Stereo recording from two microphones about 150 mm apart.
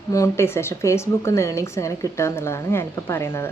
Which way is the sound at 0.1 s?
20° left (ahead or behind).